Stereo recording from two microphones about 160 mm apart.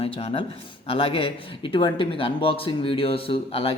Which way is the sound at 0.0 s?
35° left (ahead or behind).